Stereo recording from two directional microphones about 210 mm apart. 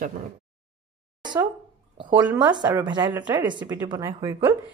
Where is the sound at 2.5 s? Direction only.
20° right (ahead or behind).